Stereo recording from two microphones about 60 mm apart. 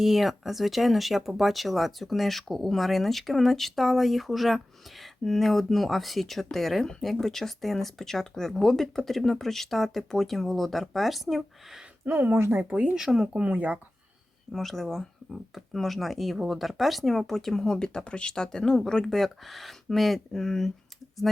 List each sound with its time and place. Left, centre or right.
0.0 s speech: centre
12.0 s speech: right
12.6 s speech: right
13.3 s speech: right
14.5 s speech: centre